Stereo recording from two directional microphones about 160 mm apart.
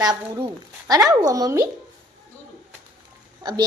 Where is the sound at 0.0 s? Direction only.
25° right (ahead or behind).